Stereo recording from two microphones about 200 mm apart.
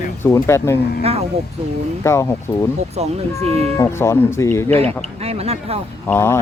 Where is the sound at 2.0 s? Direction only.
15° left (ahead or behind).